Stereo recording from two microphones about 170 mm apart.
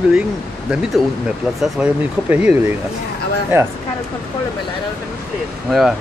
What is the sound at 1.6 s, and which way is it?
Speech, 5° right (ahead or behind).